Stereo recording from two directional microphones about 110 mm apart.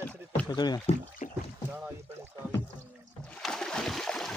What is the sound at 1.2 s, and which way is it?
Rowboat, 90° left.